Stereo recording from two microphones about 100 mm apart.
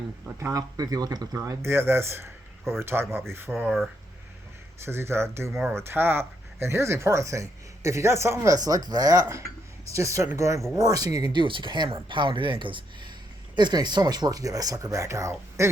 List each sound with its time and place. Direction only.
0.3 s speech: 30° right (ahead or behind)
3.5 s speech: 10° right (ahead or behind)
4.9 s speech: 25° right (ahead or behind)
8.5 s speech: 40° right (ahead or behind)
11.2 s speech: 50° right (ahead or behind); by 15.7 s 30° right (ahead or behind)